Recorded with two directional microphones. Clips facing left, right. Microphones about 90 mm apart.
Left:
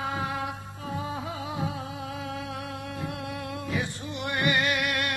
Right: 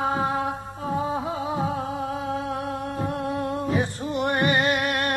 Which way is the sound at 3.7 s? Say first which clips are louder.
Right 7 dB; 40° right (ahead or behind).